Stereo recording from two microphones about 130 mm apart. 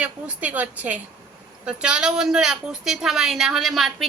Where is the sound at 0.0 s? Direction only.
10° right (ahead or behind).